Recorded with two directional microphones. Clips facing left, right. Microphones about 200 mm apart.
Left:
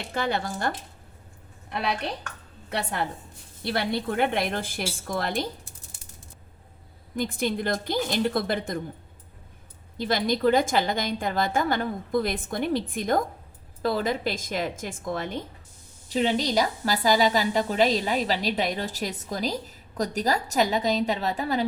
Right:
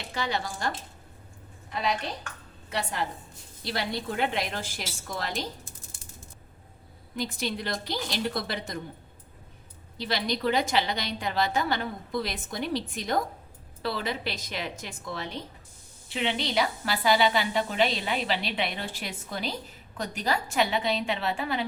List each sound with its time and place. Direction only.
0.1 s a woman's voice: 50° left (ahead or behind)
1.7 s a woman's voice: 60° left (ahead or behind)
7.2 s a woman's voice: 50° left (ahead or behind)
10.0 s a woman's voice: 50° left (ahead or behind)